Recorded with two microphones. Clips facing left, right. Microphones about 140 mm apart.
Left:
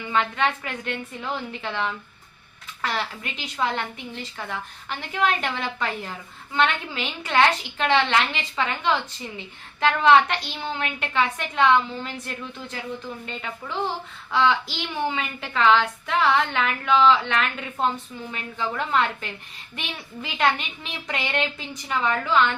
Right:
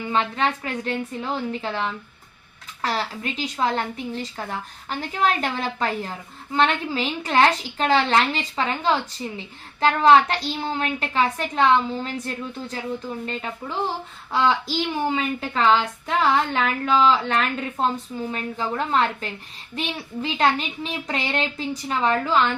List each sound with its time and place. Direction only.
0.0 s a woman's voice: 30° right (ahead or behind)